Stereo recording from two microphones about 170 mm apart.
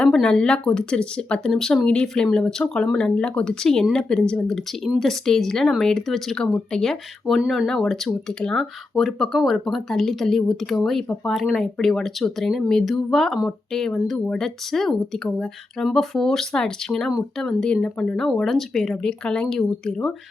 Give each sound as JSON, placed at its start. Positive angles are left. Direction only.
{"t": 0.0, "sound": "speech", "side_deg": 5}